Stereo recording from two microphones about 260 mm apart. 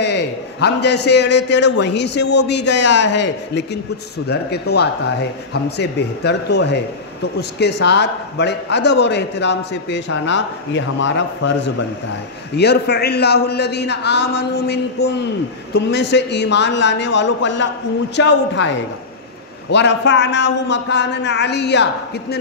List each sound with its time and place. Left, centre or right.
0.0 s a man's voice: left
19.7 s a man's voice: left